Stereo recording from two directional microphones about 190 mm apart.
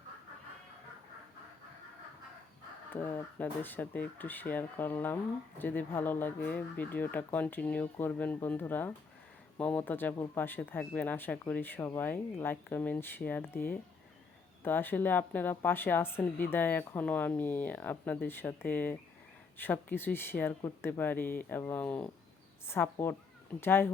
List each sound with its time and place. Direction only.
2.9 s speech: 10° left (ahead or behind)